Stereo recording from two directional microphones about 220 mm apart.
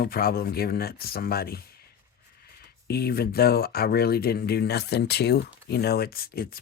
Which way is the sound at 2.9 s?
45° left (ahead or behind).